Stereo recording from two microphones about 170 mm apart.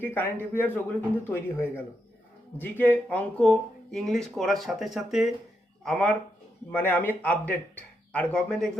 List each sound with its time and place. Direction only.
0.0 s speech: 10° left (ahead or behind)